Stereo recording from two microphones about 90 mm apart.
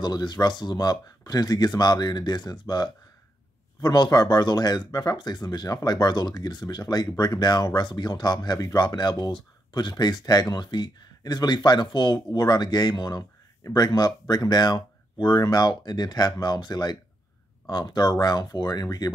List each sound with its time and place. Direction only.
0.0 s speech: 50° left (ahead or behind)
12.3 s speech: 50° left (ahead or behind)